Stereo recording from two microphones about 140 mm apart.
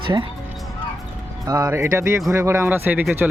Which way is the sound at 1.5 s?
25° right (ahead or behind).